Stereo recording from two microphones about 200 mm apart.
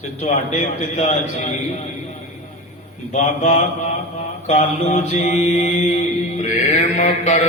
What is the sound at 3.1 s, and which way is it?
Mantra, 35° left (ahead or behind).